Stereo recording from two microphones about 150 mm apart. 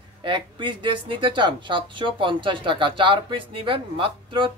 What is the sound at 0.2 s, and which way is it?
Speech, 35° right (ahead or behind).